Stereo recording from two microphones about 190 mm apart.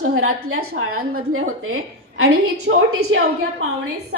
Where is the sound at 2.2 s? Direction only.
60° right (ahead or behind).